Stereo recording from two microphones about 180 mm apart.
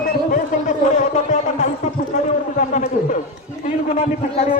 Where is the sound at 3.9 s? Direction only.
35° left (ahead or behind).